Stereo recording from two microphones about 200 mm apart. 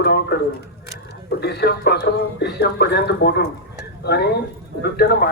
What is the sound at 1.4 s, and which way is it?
Speech, 55° left (ahead or behind).